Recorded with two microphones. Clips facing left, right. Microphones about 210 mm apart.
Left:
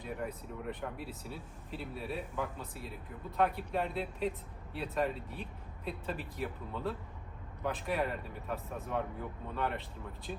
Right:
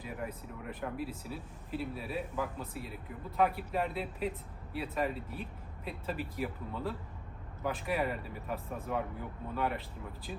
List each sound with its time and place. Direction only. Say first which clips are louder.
0.0 s speech: left 1 dB; 5° right (ahead or behind)